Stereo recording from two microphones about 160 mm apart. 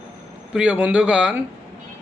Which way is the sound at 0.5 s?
5° right (ahead or behind).